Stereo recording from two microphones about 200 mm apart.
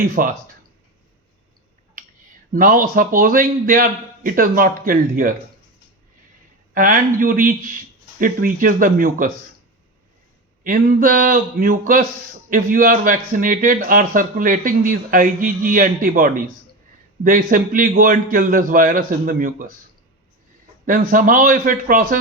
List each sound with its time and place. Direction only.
0.0 s a man's voice: 45° right (ahead or behind)
2.5 s a man's voice: 45° right (ahead or behind)
6.7 s a man's voice: 40° right (ahead or behind)
10.6 s a man's voice: 45° right (ahead or behind)
20.8 s a man's voice: 45° right (ahead or behind)